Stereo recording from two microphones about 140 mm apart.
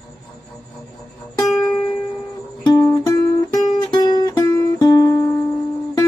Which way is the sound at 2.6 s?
30° left (ahead or behind).